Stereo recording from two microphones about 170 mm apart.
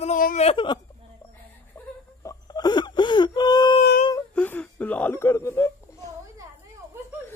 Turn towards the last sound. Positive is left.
turn(degrees=15)  # may be behind; listen again after turning